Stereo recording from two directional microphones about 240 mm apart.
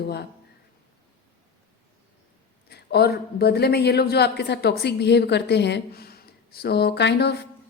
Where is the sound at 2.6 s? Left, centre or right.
Left.